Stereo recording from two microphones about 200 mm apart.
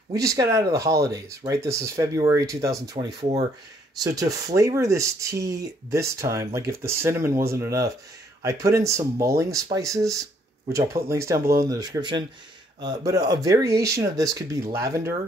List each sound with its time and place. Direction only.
0.1 s a man's voice: 15° right (ahead or behind)